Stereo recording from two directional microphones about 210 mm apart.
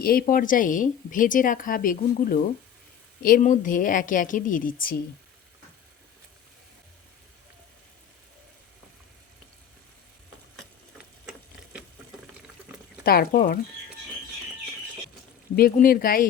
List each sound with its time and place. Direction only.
0.0 s a woman's voice: 45° left (ahead or behind)
10.6 s sewing machine: 5° right (ahead or behind)
13.1 s speech: 45° left (ahead or behind)
15.5 s speech: 45° left (ahead or behind)